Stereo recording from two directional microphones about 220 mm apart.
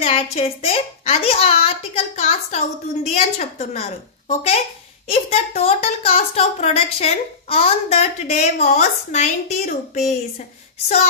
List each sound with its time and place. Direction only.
0.0 s a woman's voice: 30° left (ahead or behind)